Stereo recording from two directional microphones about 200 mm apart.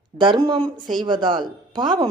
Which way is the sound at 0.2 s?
25° right (ahead or behind).